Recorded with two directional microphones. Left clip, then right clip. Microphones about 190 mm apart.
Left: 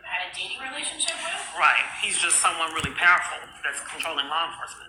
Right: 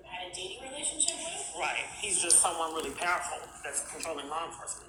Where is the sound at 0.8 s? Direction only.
90° left.